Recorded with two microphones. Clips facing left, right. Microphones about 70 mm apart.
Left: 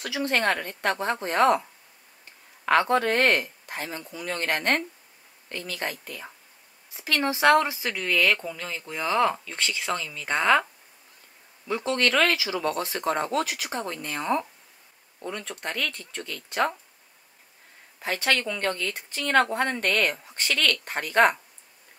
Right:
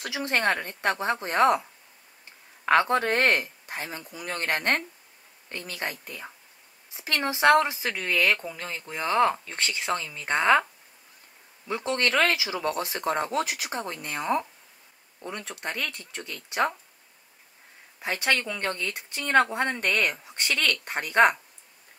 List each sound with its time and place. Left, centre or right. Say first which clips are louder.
0.0 s speech: left 2 dB; centre
0.4 s speech: even; centre
2.6 s speech: even; centre
8.5 s speech: left 1 dB; right
8.9 s speech: right 1 dB; centre
9.4 s speech: left 1 dB; right
10.3 s speech: even; centre
11.6 s speech: left 2 dB; centre
13.7 s speech: left 1 dB; centre
17.9 s speech: left 1 dB; centre